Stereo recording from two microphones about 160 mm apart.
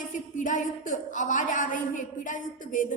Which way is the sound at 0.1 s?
50° left (ahead or behind).